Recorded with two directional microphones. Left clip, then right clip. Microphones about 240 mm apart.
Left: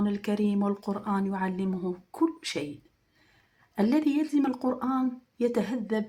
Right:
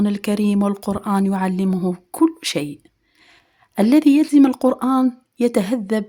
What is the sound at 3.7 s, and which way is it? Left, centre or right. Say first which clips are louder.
Speech: right 11 dB; right.